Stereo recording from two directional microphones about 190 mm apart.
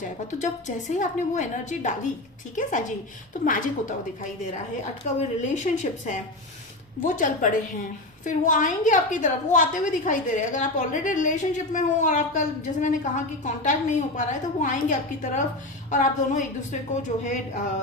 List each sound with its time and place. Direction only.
0.3 s a woman's voice: 40° left (ahead or behind)